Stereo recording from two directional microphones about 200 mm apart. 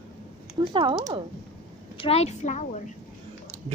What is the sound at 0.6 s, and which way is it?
Speech, 25° right (ahead or behind).